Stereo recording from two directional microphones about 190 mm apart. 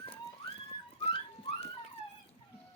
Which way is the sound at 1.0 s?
35° left (ahead or behind).